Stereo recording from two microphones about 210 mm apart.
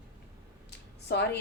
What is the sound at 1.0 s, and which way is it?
Speech, 50° left (ahead or behind).